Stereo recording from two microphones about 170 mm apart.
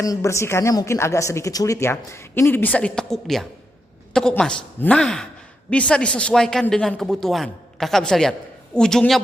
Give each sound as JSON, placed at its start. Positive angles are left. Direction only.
{"t": 0.0, "sound": "a man's voice", "side_deg": 20}